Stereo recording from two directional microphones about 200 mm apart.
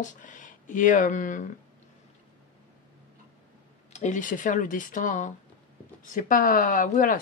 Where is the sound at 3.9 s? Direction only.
40° left (ahead or behind).